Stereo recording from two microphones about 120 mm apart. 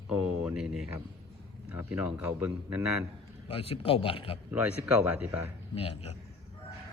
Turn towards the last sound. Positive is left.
turn(degrees=55)  # may be behind; listen again after turning